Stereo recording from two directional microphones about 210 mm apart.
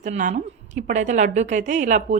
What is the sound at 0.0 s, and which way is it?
A woman's voice, 35° right (ahead or behind).